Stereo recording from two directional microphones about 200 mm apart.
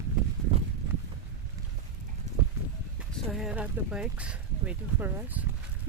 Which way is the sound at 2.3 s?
35° right (ahead or behind).